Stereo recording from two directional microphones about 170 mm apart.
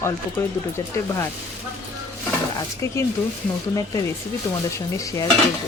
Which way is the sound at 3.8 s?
20° left (ahead or behind).